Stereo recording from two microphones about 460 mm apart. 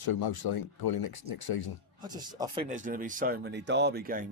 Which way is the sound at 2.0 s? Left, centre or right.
Centre.